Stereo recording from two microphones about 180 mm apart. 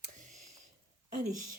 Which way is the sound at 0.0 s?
40° right (ahead or behind).